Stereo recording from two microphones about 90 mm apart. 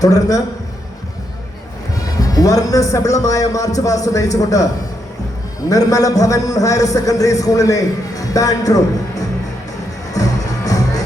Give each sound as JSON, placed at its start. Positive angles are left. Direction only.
{"t": 0.0, "sound": "a man's voice", "side_deg": 40}
{"t": 2.2, "sound": "a man's voice", "side_deg": 40}
{"t": 5.6, "sound": "a man's voice", "side_deg": 40}
{"t": 10.2, "sound": "music", "side_deg": 40}